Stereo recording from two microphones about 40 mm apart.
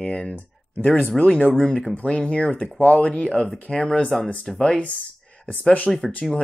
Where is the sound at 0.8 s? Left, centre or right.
Left.